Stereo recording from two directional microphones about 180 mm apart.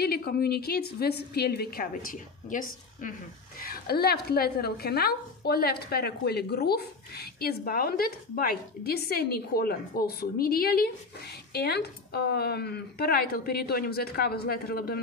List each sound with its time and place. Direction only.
0.0 s a woman's voice: 60° left (ahead or behind)